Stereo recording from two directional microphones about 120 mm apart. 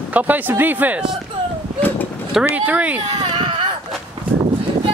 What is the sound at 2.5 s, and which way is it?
Speech, 10° right (ahead or behind).